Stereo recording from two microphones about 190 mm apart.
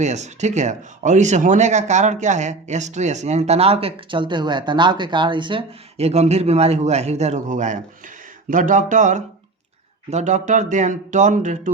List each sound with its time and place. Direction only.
0.0 s speech: 35° right (ahead or behind)